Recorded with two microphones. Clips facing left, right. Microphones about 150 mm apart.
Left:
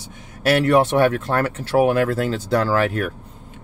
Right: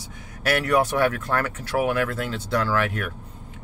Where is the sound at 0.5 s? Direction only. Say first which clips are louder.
Left 5 dB; 25° left (ahead or behind).